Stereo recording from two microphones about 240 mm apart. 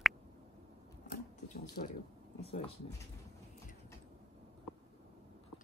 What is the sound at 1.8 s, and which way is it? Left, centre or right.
Speech, left.